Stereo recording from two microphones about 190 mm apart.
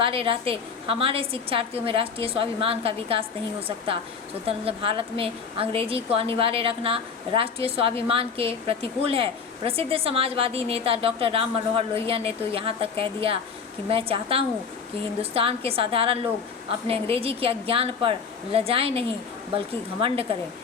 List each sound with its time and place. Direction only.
0.0 s a woman's voice: 30° right (ahead or behind)
4.4 s a woman's voice: 30° right (ahead or behind)